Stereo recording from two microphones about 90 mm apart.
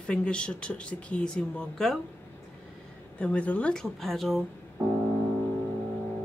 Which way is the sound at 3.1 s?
15° left (ahead or behind).